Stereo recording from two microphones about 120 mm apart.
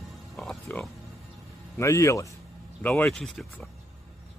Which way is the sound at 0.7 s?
15° left (ahead or behind).